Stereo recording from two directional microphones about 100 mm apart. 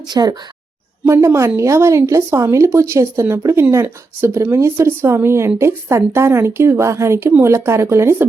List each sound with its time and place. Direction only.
0.1 s speech: 40° right (ahead or behind)
1.0 s a woman's voice: 25° right (ahead or behind)